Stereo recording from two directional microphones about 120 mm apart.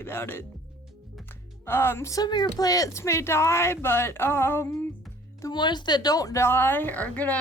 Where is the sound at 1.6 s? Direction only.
20° left (ahead or behind).